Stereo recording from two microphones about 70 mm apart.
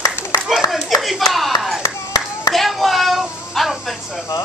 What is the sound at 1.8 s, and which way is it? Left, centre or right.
Clapping, left.